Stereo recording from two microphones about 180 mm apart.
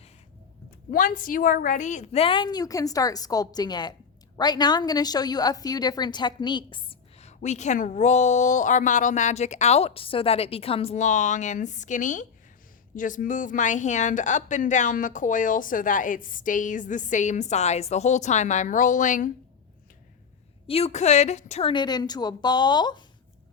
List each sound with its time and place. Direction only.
0.9 s a woman's voice: 50° left (ahead or behind)
20.7 s a woman's voice: 35° left (ahead or behind)
21.7 s a woman's voice: 25° left (ahead or behind)